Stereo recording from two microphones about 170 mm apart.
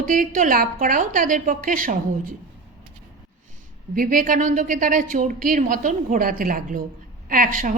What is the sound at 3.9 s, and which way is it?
A woman's voice, 55° right (ahead or behind).